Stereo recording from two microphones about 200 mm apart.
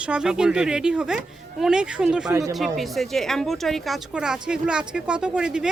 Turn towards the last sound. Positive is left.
turn(degrees=-5)  # may be behind; listen again after turning